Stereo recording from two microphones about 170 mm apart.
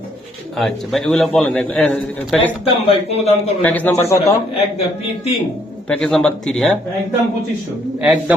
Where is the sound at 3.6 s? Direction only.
10° left (ahead or behind).